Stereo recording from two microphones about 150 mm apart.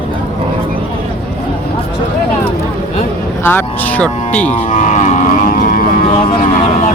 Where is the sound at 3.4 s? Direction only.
15° left (ahead or behind).